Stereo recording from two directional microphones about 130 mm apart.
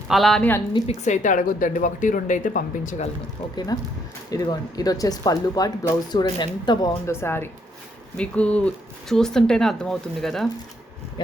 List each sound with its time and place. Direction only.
0.1 s speech: centre (ahead or behind)
1.0 s speech: 70° left (ahead or behind)
3.7 s speech: 30° left (ahead or behind)
7.1 s speech: 20° left (ahead or behind); by 10.5 s centre (ahead or behind)